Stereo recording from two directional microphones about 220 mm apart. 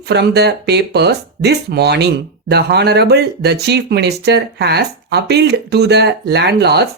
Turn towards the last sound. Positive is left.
turn(degrees=-50)  # may be behind; listen again after turning